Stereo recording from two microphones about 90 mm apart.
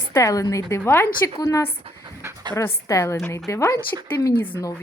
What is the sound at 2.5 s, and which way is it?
A woman's voice, 35° left (ahead or behind).